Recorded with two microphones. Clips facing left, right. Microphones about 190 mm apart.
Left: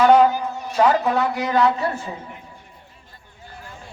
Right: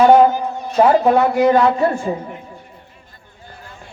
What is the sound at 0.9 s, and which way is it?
A woman's voice, 50° right (ahead or behind).